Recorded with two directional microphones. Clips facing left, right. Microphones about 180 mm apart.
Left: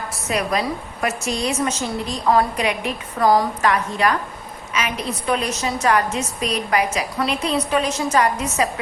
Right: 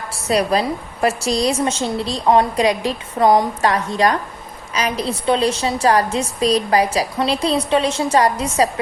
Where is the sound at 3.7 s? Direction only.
35° right (ahead or behind).